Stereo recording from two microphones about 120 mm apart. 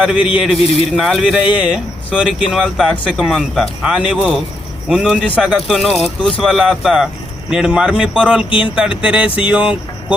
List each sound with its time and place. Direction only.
0.0 s speech: 5° right (ahead or behind)
8.4 s speech: 45° left (ahead or behind)
8.7 s speech: 10° right (ahead or behind)